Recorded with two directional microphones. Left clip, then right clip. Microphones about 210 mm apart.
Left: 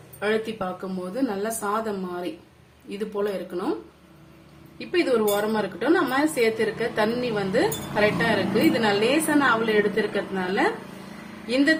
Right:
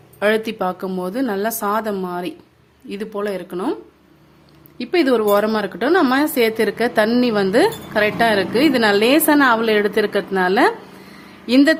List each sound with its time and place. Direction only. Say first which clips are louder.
0.2 s a woman's voice: right 7 dB; 50° right (ahead or behind)
4.8 s speech: right 6 dB; 55° right (ahead or behind)